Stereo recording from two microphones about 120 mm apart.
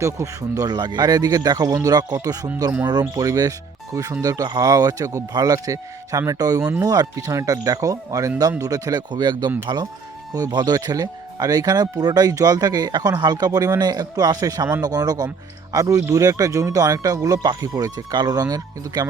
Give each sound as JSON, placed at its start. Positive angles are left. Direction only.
{"t": 0.0, "sound": "speech", "side_deg": -30}